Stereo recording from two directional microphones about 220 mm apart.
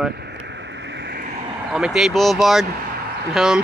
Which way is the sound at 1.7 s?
Centre (ahead or behind).